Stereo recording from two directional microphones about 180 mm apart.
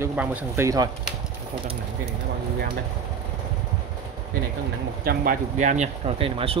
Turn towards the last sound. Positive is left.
turn(degrees=-30)  # may be behind; listen again after turning